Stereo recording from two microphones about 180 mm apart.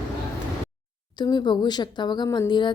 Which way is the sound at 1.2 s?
25° left (ahead or behind).